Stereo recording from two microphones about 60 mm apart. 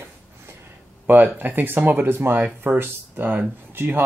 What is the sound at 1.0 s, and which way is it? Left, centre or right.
Speech, right.